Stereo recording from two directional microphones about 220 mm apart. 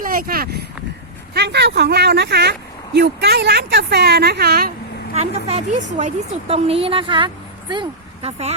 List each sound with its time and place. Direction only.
0.0 s speech: 40° right (ahead or behind)
5.5 s a woman's voice: 30° right (ahead or behind)